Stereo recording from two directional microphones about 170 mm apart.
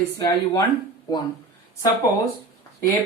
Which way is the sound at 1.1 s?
20° left (ahead or behind).